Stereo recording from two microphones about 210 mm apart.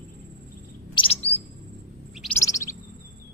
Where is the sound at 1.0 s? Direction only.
30° left (ahead or behind).